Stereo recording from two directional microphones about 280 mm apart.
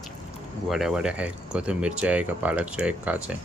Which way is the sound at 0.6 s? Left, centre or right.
Centre.